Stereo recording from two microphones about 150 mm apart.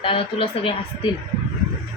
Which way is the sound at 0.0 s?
35° left (ahead or behind).